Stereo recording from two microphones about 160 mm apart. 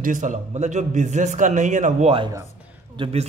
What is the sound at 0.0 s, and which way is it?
A man's voice, 55° right (ahead or behind).